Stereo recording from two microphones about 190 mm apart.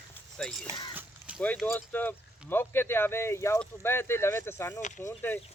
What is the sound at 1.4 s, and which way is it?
Speech, 5° left (ahead or behind).